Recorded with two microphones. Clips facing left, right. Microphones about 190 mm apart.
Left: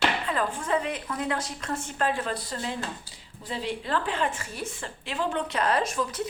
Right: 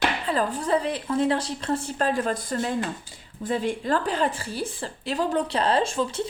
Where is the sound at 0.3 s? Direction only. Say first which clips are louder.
Right 4 dB; 35° right (ahead or behind).